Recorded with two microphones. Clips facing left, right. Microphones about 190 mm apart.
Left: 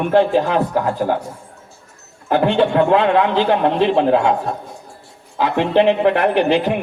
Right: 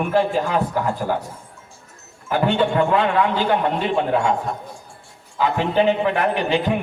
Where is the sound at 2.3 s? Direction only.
70° left (ahead or behind).